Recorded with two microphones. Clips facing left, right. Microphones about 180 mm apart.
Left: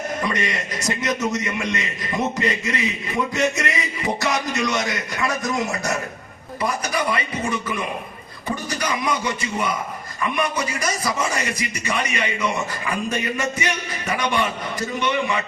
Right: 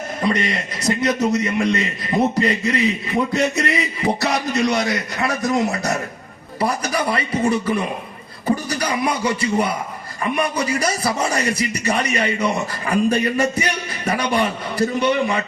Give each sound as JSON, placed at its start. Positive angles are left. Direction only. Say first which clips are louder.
{"t": 0.2, "sound": "a man's voice", "louder": "right 8 dB", "side_deg": -30}
{"t": 8.4, "sound": "beatboxing", "louder": "right 5 dB", "side_deg": -35}
{"t": 10.2, "sound": "a man's voice", "louder": "right 3 dB", "side_deg": -35}